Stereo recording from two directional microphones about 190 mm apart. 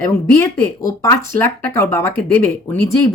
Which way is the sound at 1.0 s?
15° left (ahead or behind).